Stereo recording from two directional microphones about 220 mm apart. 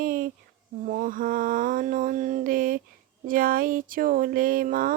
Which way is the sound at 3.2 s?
40° right (ahead or behind).